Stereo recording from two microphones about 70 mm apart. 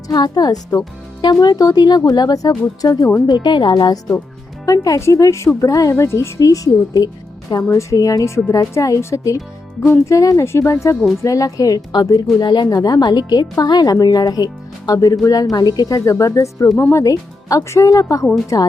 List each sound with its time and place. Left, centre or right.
0.1 s speech: left
3.2 s speech: left
5.9 s speech: left
7.9 s speech: left
8.2 s speech: left
9.0 s speech: left
11.2 s speech: left
12.7 s speech: left
16.0 s speech: left